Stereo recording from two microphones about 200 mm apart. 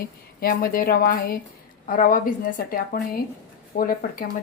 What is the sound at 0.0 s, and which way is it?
A woman's voice, 45° left (ahead or behind).